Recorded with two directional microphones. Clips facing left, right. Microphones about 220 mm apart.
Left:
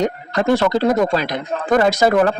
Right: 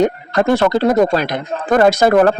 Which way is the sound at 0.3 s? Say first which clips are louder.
Left 1 dB; 55° right (ahead or behind).